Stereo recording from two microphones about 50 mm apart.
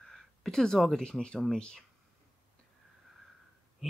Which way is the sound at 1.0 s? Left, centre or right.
Centre.